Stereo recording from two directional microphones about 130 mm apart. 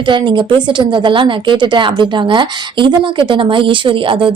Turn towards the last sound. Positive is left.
turn(degrees=-40)  # may be behind; listen again after turning